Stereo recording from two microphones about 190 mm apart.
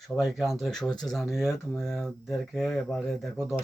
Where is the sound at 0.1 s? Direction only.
Centre (ahead or behind).